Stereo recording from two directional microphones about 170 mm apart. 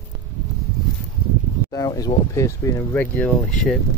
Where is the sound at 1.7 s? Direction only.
20° left (ahead or behind); by 3.7 s 5° left (ahead or behind).